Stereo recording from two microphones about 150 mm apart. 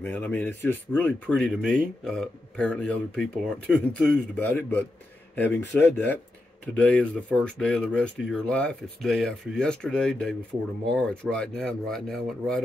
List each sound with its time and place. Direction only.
0.0 s speech: 10° left (ahead or behind)